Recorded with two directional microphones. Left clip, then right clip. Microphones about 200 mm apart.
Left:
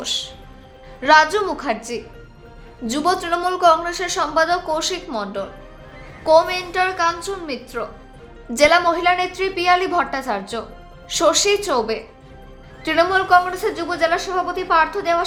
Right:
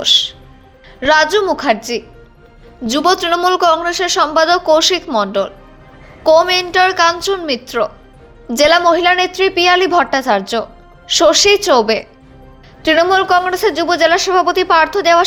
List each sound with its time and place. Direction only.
0.0 s a woman's voice: 30° right (ahead or behind)